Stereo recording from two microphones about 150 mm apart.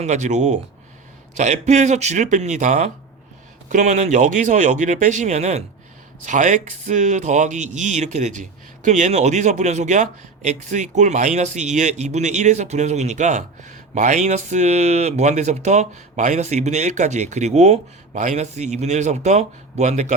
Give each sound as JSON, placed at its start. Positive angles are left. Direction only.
{"t": 0.0, "sound": "speech", "side_deg": -50}